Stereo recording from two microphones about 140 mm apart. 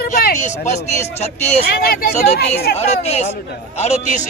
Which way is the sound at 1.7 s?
90° left.